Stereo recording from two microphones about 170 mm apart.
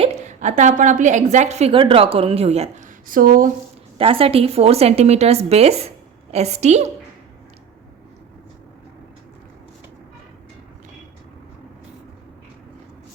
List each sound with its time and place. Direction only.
0.0 s a woman's voice: 40° right (ahead or behind)
3.1 s speech: 55° right (ahead or behind)
3.9 s a woman's voice: 35° right (ahead or behind)